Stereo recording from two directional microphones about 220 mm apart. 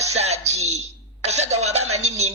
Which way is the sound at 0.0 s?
30° right (ahead or behind).